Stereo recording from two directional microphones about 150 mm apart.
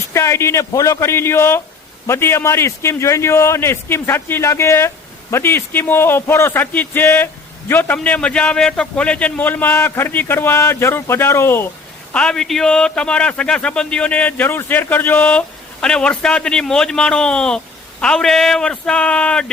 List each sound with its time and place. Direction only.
0.1 s a man's voice: 20° left (ahead or behind)
12.1 s a man's voice: 5° left (ahead or behind)